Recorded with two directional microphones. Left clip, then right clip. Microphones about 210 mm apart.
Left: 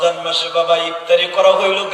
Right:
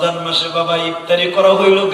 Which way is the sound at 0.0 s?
45° left (ahead or behind).